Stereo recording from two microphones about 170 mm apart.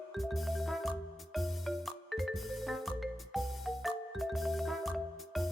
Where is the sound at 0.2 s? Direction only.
Centre (ahead or behind).